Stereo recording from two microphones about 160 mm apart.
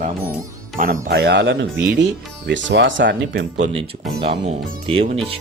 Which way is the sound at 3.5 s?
40° right (ahead or behind).